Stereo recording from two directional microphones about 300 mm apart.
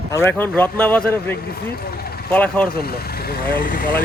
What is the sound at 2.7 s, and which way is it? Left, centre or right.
Speech, left.